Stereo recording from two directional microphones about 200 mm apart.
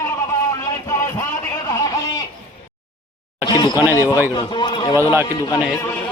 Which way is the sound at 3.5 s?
20° left (ahead or behind).